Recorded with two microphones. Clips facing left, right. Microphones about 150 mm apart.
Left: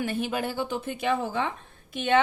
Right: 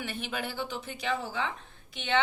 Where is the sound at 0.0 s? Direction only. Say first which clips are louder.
Left 7 dB; 45° left (ahead or behind).